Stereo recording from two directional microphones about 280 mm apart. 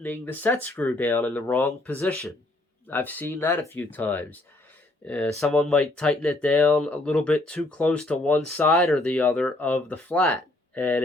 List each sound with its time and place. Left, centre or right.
0.0 s speech: centre